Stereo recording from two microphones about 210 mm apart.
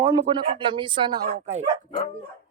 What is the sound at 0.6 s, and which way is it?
Speech, 25° right (ahead or behind).